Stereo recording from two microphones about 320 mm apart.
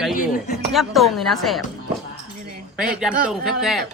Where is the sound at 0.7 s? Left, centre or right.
Centre.